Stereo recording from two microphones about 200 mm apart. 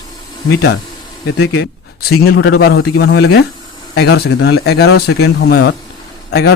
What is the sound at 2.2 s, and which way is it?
Speech, 50° left (ahead or behind).